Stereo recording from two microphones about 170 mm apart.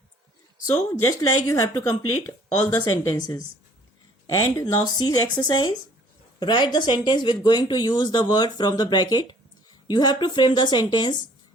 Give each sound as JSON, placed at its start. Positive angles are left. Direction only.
{"t": 0.7, "sound": "speech", "side_deg": 15}